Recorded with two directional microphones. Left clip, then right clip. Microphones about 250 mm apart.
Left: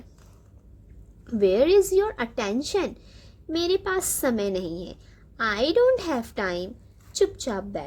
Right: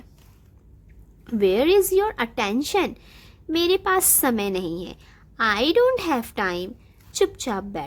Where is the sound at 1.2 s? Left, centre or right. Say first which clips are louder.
Right 1 dB; right.